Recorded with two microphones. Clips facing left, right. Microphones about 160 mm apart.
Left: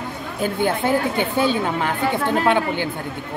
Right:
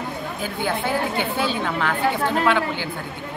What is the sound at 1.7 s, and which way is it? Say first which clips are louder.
Speech: left 1 dB; 20° left (ahead or behind).